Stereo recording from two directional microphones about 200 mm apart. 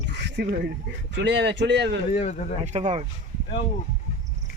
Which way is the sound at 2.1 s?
35° left (ahead or behind).